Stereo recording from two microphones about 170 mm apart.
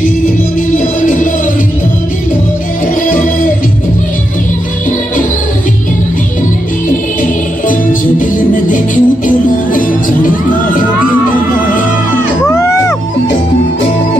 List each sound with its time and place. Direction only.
8.4 s music: 50° left (ahead or behind)
12.4 s music: 15° left (ahead or behind)